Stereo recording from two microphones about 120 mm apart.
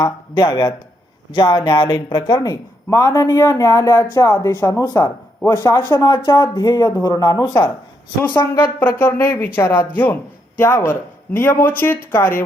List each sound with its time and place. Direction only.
0.0 s speech: 35° left (ahead or behind)
9.0 s speech: 15° left (ahead or behind)